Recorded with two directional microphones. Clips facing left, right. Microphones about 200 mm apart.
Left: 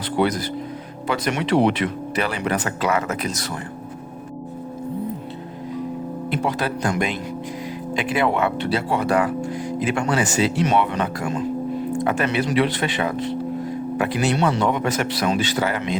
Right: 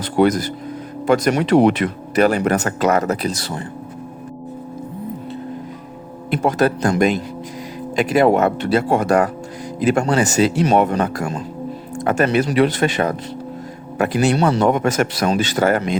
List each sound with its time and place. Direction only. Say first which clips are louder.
0.2 s speech: right 6 dB; 45° right (ahead or behind)
6.3 s speech: right 8 dB; 45° right (ahead or behind)